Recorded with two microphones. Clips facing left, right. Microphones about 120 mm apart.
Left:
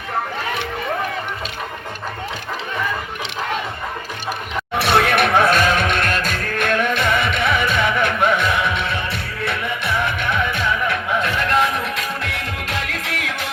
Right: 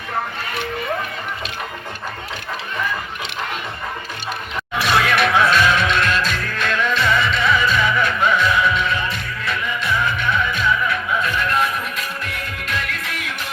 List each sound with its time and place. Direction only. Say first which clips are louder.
4.7 s music: left 2 dB; 60° left (ahead or behind); by 13.5 s 90° left